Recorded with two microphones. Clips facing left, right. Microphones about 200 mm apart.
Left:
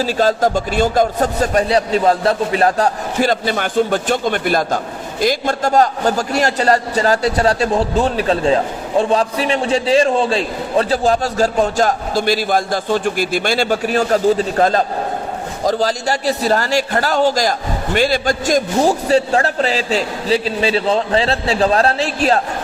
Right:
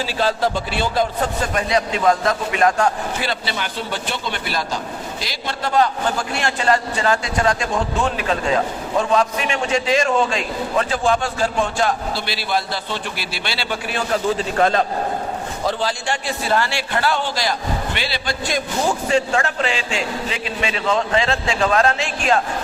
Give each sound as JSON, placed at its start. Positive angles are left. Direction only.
{"t": 0.0, "sound": "a man's voice", "side_deg": 45}